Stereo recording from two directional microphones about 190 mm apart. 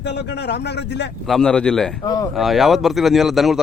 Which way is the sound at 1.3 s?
5° left (ahead or behind).